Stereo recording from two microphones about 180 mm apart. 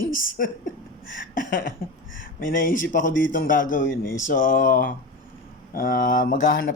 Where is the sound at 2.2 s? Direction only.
50° left (ahead or behind).